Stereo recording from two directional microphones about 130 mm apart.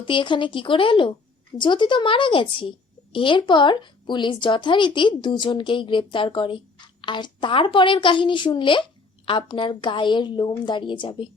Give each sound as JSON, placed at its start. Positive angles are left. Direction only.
{"t": 0.0, "sound": "a woman's voice", "side_deg": 40}